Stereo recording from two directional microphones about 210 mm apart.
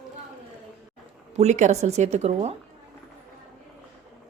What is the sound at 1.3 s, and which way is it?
Speech, 35° right (ahead or behind).